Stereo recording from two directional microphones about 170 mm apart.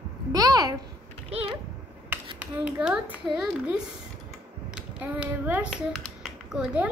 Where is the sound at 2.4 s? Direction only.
5° right (ahead or behind).